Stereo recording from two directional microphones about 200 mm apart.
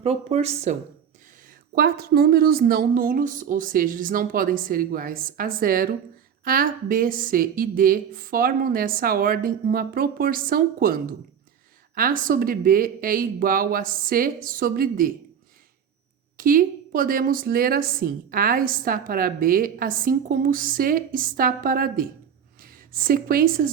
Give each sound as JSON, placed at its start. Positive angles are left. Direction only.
{"t": 0.0, "sound": "speech", "side_deg": -30}
{"t": 1.7, "sound": "a woman's voice", "side_deg": -50}
{"t": 16.4, "sound": "a woman's voice", "side_deg": -45}